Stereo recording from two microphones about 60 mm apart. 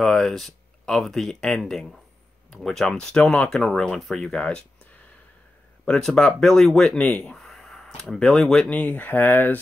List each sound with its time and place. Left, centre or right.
0.0 s speech: centre
5.9 s speech: centre
7.3 s a sound: centre
8.6 s speech: left